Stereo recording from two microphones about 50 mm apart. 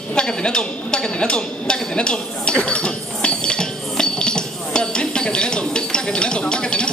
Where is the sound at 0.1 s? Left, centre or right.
Centre.